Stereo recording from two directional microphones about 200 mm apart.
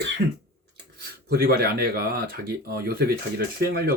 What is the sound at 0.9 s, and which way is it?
Speech, 50° right (ahead or behind).